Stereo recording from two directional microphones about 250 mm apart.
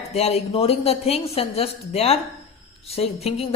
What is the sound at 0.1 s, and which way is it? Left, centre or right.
A woman's voice, left.